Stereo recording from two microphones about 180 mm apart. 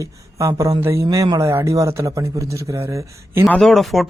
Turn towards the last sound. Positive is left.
turn(degrees=0)  # may be behind; listen again after turning